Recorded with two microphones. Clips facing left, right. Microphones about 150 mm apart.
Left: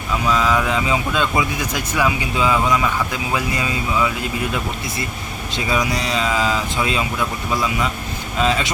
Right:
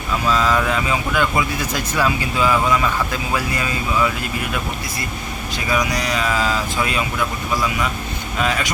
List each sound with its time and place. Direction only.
0.3 s speech: 10° left (ahead or behind)
8.4 s speech: 25° left (ahead or behind)